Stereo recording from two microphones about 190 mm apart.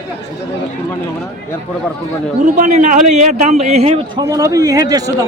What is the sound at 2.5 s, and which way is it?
A man's voice, 40° right (ahead or behind).